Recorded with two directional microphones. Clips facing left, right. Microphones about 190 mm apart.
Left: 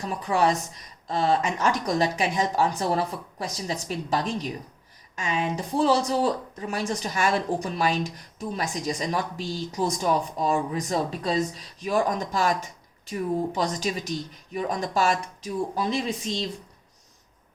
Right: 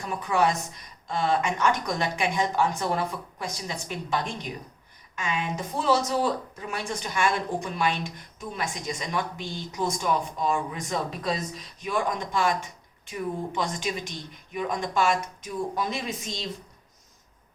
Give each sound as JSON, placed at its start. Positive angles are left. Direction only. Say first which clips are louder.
{"t": 0.2, "sound": "speech", "louder": "left 1 dB", "side_deg": 35}